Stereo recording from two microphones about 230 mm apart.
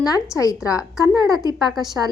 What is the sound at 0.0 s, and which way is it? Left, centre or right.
A woman's voice, centre.